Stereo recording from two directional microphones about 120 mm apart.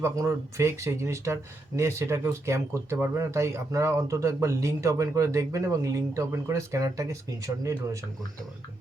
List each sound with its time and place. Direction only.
0.0 s speech: 25° right (ahead or behind)